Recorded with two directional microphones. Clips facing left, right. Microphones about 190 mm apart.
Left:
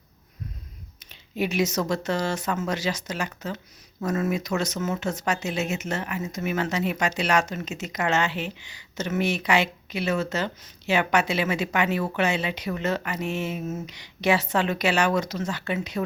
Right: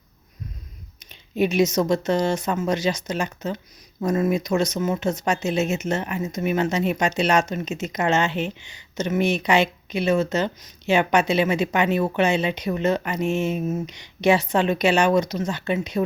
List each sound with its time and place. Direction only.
1.4 s a woman's voice: 20° right (ahead or behind)